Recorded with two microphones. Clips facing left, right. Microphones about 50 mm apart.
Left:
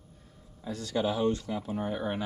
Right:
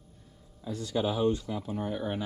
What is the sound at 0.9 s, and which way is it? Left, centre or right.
Speech, centre.